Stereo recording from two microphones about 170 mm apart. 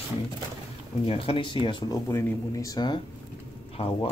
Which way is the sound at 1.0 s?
35° left (ahead or behind).